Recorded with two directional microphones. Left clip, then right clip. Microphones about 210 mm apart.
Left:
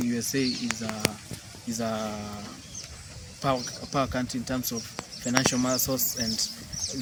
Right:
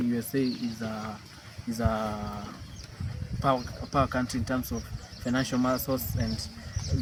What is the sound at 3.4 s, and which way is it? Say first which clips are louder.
Speech: right 1 dB; 5° left (ahead or behind).